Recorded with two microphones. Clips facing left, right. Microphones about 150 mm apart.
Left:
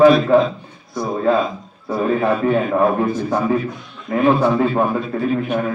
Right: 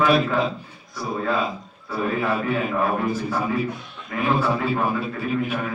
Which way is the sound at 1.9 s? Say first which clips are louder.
Left 6 dB; 40° left (ahead or behind).